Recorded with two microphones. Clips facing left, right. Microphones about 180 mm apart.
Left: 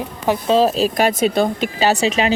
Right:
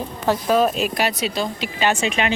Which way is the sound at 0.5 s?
30° left (ahead or behind).